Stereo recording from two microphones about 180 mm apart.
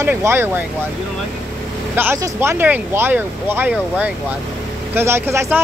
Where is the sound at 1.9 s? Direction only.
15° right (ahead or behind).